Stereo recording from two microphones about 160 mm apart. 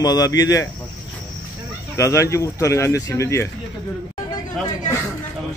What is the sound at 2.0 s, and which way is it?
A man's voice, 20° left (ahead or behind).